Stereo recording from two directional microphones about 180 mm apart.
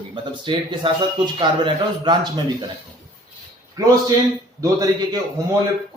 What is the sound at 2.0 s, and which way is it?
Speech, 25° right (ahead or behind).